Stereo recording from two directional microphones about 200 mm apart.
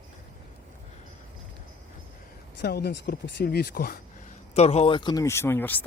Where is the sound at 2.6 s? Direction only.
55° left (ahead or behind).